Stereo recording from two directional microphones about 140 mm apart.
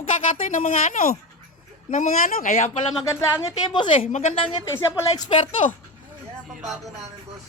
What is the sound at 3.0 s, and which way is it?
A woman's voice, 20° left (ahead or behind).